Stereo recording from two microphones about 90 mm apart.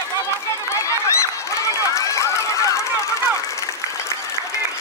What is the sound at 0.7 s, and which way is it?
Run, 35° left (ahead or behind).